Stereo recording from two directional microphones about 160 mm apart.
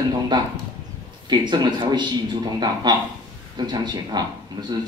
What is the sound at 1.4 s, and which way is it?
Speech, 25° right (ahead or behind).